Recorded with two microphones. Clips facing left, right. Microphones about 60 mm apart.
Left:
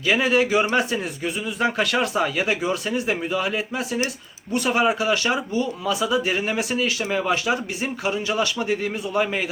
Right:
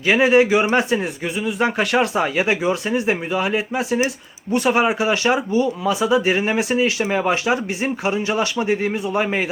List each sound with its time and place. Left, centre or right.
0.0 s speech: right